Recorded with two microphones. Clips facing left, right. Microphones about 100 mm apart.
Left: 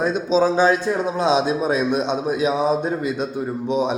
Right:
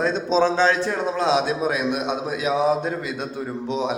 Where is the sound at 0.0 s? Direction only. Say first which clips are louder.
Left 1 dB; 10° left (ahead or behind).